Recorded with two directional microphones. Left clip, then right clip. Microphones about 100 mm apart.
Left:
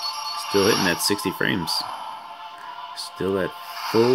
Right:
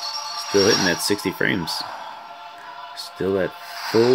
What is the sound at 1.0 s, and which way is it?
Speech, 10° left (ahead or behind).